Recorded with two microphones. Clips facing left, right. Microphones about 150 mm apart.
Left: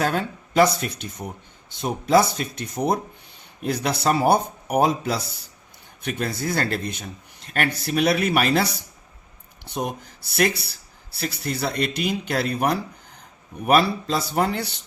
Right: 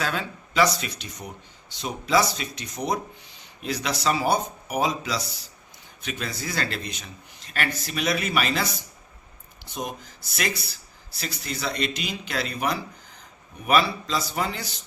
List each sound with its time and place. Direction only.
0.0 s speech: 50° left (ahead or behind)
9.6 s speech: 60° left (ahead or behind)